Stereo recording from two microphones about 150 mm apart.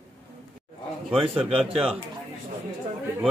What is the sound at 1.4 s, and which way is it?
Speech, centre (ahead or behind).